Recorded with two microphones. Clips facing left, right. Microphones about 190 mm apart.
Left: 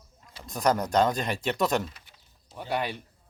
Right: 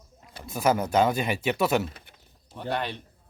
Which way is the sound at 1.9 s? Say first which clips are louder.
Right 5 dB; 55° right (ahead or behind).